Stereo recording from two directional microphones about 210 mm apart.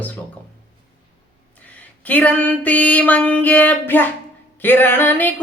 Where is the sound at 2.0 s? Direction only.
5° left (ahead or behind).